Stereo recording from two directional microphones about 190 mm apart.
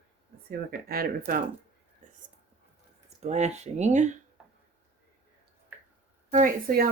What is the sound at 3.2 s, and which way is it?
Speech, 35° right (ahead or behind).